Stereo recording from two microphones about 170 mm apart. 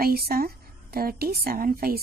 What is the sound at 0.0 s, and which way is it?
Speech, 65° right (ahead or behind).